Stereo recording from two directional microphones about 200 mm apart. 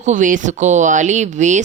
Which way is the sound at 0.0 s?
40° right (ahead or behind).